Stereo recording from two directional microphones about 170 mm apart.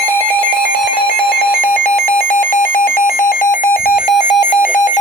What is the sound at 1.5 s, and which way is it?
Alarm, 55° left (ahead or behind).